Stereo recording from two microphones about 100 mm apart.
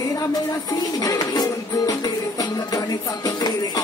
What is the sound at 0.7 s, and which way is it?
Music, 35° left (ahead or behind).